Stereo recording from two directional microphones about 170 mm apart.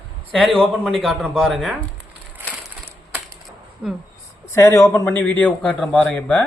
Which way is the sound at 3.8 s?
5° right (ahead or behind).